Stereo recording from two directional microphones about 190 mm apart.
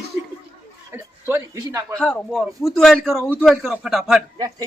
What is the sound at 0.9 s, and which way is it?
Speech, 15° right (ahead or behind).